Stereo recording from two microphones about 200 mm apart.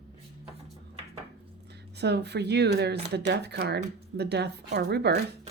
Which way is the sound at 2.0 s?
55° right (ahead or behind).